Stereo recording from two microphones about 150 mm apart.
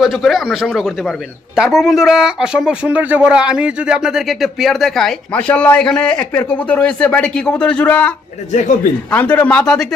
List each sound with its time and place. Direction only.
0.0 s speech: centre (ahead or behind)
8.5 s speech: 55° left (ahead or behind)
9.0 s a man's voice: 10° left (ahead or behind)